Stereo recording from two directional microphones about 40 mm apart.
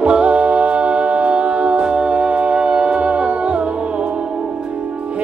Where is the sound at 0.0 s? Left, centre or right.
Right.